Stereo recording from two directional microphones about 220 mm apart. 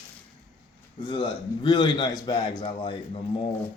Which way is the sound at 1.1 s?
20° left (ahead or behind).